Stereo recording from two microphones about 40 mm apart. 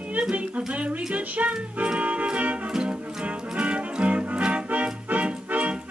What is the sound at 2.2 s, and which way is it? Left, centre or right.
Music, right.